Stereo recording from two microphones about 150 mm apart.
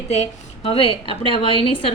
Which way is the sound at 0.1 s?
45° left (ahead or behind).